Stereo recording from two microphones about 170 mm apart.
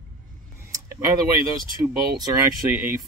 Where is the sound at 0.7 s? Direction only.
15° right (ahead or behind).